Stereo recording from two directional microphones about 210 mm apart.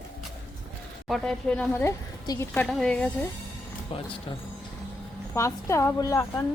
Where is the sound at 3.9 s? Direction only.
25° left (ahead or behind).